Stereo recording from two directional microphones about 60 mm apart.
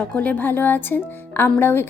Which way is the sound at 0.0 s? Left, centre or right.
Left.